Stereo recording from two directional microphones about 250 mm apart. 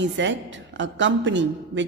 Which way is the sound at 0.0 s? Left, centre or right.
Right.